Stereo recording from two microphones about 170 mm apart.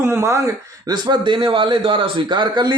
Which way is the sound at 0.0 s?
15° right (ahead or behind).